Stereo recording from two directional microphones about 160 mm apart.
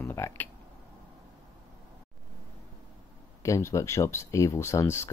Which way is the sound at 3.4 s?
20° left (ahead or behind).